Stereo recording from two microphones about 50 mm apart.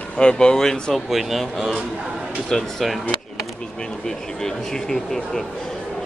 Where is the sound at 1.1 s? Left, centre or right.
Centre.